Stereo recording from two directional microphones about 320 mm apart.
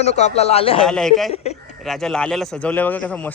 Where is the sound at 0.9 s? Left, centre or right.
Centre.